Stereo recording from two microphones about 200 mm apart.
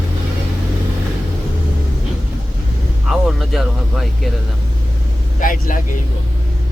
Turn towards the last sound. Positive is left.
turn(degrees=40)  # may be behind; listen again after turning